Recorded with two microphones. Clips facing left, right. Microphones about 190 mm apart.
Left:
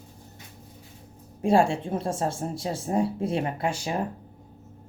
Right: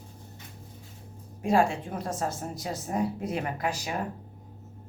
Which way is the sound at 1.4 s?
30° left (ahead or behind).